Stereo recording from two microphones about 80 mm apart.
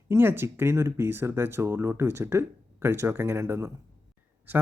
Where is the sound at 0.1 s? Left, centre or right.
Right.